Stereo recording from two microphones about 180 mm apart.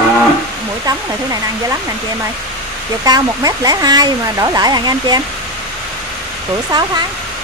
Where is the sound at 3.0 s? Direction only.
20° right (ahead or behind).